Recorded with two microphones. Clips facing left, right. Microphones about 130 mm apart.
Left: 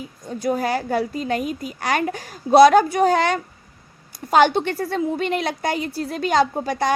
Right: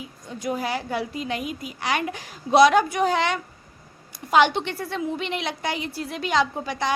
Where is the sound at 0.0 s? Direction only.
40° left (ahead or behind).